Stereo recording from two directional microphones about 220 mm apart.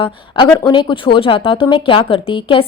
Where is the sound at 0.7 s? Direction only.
20° left (ahead or behind).